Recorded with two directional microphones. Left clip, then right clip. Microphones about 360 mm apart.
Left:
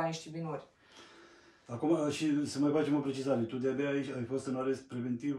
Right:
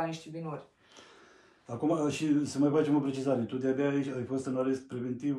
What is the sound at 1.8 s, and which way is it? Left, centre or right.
A man's voice, centre.